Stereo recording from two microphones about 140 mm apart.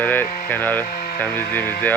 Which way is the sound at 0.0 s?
15° left (ahead or behind).